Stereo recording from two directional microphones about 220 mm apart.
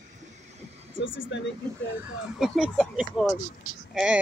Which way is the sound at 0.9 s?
60° left (ahead or behind).